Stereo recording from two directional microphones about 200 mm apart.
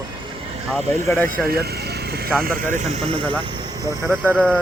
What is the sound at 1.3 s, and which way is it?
Speech, 50° right (ahead or behind).